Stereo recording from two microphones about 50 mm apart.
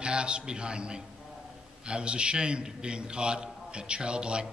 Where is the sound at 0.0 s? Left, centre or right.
Centre.